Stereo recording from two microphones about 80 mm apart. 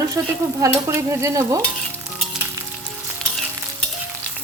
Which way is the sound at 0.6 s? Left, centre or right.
Right.